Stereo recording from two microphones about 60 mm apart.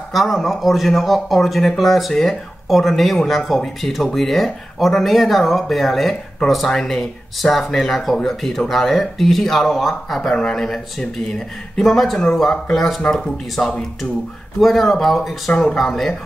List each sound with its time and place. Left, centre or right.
0.1 s speech: centre